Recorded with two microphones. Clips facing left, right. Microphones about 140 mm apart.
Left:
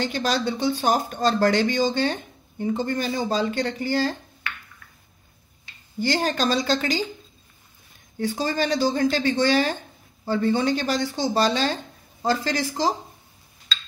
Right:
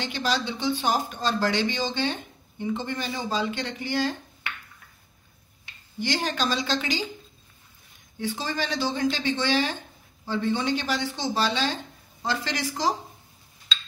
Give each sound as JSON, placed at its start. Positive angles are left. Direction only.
{"t": 0.0, "sound": "speech", "side_deg": 45}
{"t": 5.9, "sound": "speech", "side_deg": 45}
{"t": 8.2, "sound": "speech", "side_deg": 45}
{"t": 13.7, "sound": "a sound", "side_deg": 0}